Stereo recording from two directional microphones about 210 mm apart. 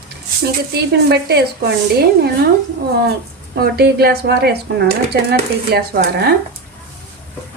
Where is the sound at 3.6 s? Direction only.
50° right (ahead or behind).